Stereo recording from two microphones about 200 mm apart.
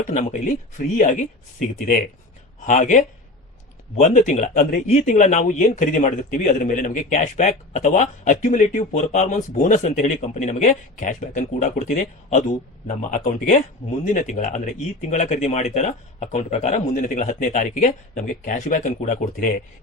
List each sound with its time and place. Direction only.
0.2 s speech: 40° left (ahead or behind)